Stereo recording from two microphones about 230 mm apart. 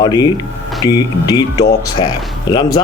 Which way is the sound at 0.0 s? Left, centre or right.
Centre.